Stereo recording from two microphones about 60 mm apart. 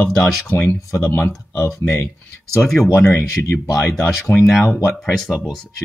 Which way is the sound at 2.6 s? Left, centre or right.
Centre.